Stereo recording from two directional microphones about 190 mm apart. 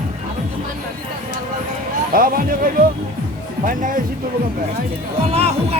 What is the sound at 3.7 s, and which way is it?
Speech, 45° right (ahead or behind).